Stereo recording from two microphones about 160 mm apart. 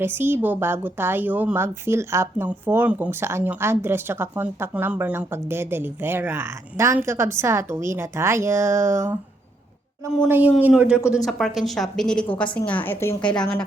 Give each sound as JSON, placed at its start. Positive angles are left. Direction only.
{"t": 0.0, "sound": "speech", "side_deg": -15}
{"t": 10.2, "sound": "a woman's voice", "side_deg": -10}